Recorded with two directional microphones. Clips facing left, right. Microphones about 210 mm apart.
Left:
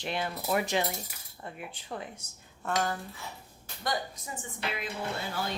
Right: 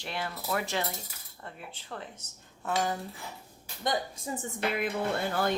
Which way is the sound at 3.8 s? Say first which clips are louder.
Right 2 dB; 25° right (ahead or behind).